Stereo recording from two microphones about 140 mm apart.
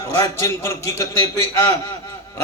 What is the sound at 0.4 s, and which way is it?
Speech, 25° left (ahead or behind).